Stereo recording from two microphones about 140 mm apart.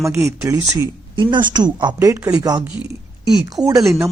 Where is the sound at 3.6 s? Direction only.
25° right (ahead or behind).